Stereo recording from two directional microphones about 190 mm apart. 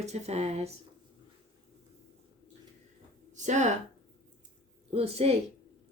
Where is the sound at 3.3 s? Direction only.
40° right (ahead or behind).